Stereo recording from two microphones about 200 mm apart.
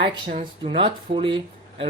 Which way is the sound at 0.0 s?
30° right (ahead or behind).